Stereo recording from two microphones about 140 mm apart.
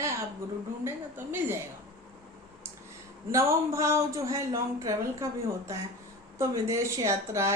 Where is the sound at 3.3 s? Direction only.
20° right (ahead or behind).